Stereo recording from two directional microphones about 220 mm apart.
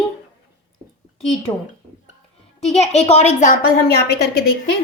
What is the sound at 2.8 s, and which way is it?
A woman's voice, 30° left (ahead or behind).